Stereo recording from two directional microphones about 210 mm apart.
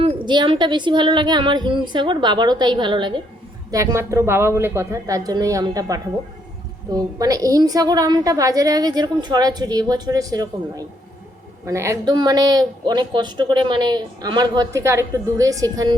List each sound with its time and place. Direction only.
0.0 s a woman's voice: 25° right (ahead or behind)